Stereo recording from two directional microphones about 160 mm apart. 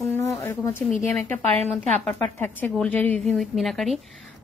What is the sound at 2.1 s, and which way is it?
A woman's voice, 10° left (ahead or behind).